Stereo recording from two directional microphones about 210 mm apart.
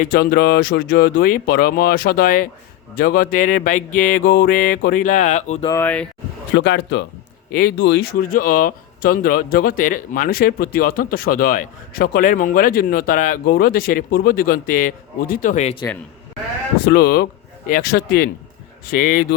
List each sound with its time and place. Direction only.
0.0 s speech: 45° left (ahead or behind)
2.9 s mantra: 45° left (ahead or behind)
5.6 s speech: 10° left (ahead or behind)
6.6 s speech: 50° left (ahead or behind); by 15.8 s 35° left (ahead or behind)
16.8 s speech: 50° left (ahead or behind)
18.9 s mantra: 40° left (ahead or behind)